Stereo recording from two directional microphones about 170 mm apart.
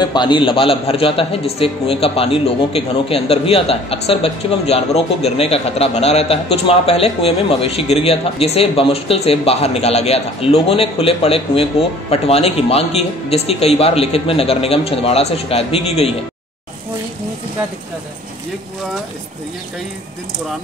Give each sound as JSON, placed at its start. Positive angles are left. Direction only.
{"t": 0.0, "sound": "a man's voice", "side_deg": 25}